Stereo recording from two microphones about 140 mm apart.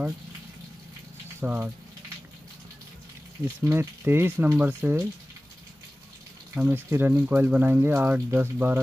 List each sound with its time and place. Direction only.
1.4 s speech: 10° right (ahead or behind)
3.6 s speech: 15° right (ahead or behind)
6.5 s speech: 15° right (ahead or behind)